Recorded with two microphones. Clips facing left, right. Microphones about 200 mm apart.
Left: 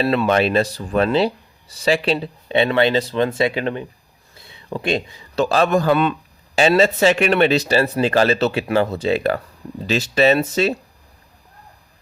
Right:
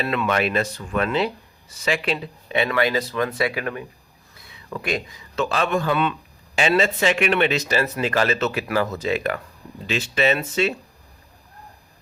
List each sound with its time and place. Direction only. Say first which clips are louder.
0.0 s a man's voice: left 5 dB; 30° left (ahead or behind)